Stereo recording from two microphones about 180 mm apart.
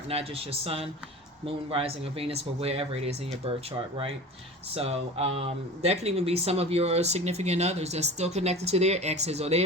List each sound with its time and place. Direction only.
0.1 s speech: 35° right (ahead or behind)
4.7 s speech: 35° right (ahead or behind)